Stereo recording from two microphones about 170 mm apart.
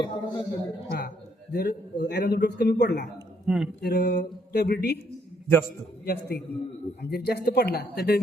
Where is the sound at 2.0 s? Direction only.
85° left.